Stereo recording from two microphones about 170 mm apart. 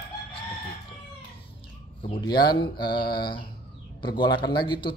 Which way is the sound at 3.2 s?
65° left (ahead or behind).